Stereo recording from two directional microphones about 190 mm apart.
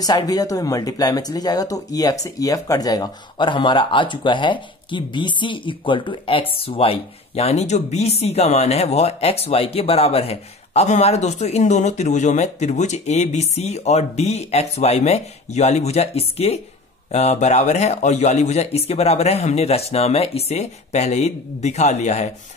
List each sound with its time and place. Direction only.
0.0 s speech: 20° left (ahead or behind); by 22.3 s 35° left (ahead or behind)